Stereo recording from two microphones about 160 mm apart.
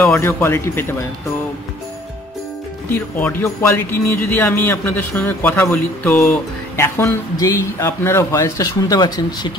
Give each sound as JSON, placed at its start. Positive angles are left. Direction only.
{"t": 0.0, "sound": "speech", "side_deg": 15}
{"t": 2.9, "sound": "speech", "side_deg": 10}